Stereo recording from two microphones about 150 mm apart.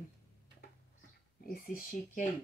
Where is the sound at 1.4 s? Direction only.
75° left (ahead or behind).